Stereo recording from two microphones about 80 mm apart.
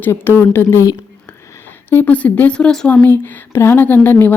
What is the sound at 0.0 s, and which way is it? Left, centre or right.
Speech, left.